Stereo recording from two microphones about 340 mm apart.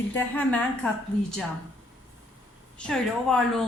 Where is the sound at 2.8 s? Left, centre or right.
Centre.